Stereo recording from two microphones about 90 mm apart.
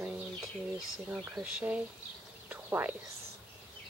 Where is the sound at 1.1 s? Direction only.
20° right (ahead or behind).